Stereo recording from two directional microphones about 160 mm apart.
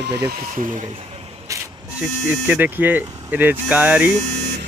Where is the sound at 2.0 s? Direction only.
10° right (ahead or behind).